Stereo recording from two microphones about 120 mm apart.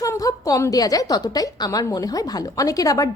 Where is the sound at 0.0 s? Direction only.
30° left (ahead or behind).